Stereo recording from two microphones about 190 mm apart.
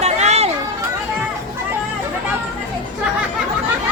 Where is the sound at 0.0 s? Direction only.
35° right (ahead or behind).